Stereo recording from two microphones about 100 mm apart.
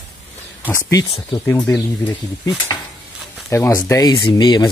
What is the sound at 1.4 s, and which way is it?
Speech, 20° left (ahead or behind).